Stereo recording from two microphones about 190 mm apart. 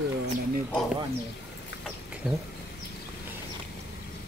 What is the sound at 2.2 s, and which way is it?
Speech, 5° right (ahead or behind).